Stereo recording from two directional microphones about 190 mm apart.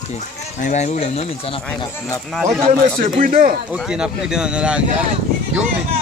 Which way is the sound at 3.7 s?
5° right (ahead or behind).